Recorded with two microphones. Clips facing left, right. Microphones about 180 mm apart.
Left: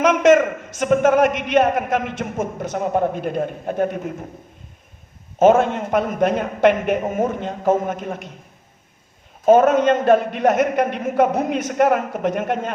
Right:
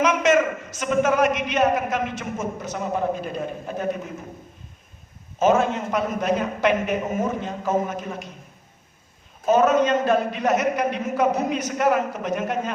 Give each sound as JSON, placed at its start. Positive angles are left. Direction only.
{"t": 0.0, "sound": "a man's voice", "side_deg": 50}
{"t": 5.4, "sound": "a man's voice", "side_deg": 55}
{"t": 9.5, "sound": "a man's voice", "side_deg": 50}